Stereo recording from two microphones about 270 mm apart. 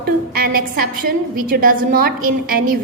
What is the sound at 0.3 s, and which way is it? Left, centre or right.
A woman's voice, right.